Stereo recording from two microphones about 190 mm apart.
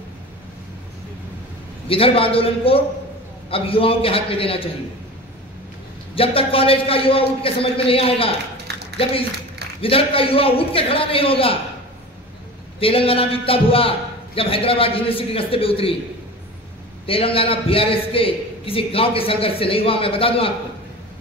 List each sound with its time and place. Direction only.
1.9 s a man's voice: 30° left (ahead or behind)
6.1 s a man's voice: 30° left (ahead or behind)
9.8 s a man's voice: 30° left (ahead or behind)
12.7 s a man's voice: 30° left (ahead or behind)
17.0 s a man's voice: 30° left (ahead or behind)